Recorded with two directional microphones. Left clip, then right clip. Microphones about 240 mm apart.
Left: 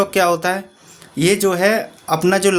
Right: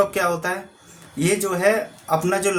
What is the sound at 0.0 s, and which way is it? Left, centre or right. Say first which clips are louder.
Speech: left 5 dB; left.